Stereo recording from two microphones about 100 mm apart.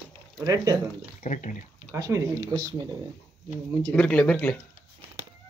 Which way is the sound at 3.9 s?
15° left (ahead or behind).